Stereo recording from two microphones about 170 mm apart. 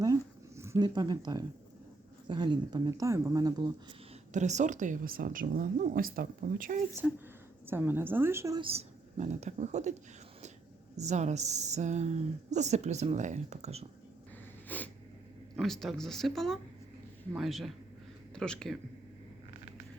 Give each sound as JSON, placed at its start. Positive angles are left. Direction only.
{"t": 0.0, "sound": "a sound", "side_deg": -20}
{"t": 2.2, "sound": "speech", "side_deg": -30}
{"t": 4.3, "sound": "speech", "side_deg": -45}
{"t": 7.0, "sound": "a woman's voice", "side_deg": 0}
{"t": 8.6, "sound": "speech", "side_deg": -40}
{"t": 10.9, "sound": "speech", "side_deg": -45}
{"t": 14.7, "sound": "snort", "side_deg": 10}
{"t": 15.5, "sound": "speech", "side_deg": 0}